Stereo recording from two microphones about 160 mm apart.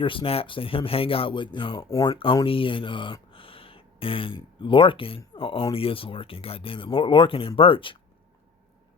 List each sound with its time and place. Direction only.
0.0 s speech: 35° left (ahead or behind)